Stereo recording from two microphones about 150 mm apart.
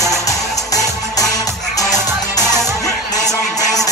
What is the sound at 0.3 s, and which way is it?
Music, 25° left (ahead or behind).